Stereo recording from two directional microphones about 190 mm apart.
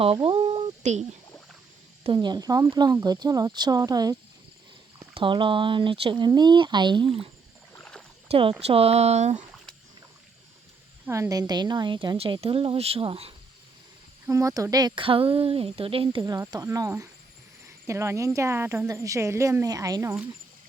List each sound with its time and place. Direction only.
0.0 s speech: 30° right (ahead or behind)
2.0 s speech: 25° right (ahead or behind)
7.7 s rowboat: 5° left (ahead or behind)
8.3 s speech: 30° right (ahead or behind)
11.0 s speech: 15° right (ahead or behind); by 13.3 s 30° right (ahead or behind)
14.3 s speech: 15° right (ahead or behind)